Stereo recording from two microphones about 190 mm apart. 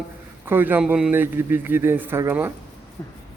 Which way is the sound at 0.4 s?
10° right (ahead or behind).